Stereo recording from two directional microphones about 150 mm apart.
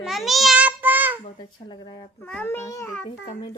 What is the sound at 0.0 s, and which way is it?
Child singing, centre (ahead or behind).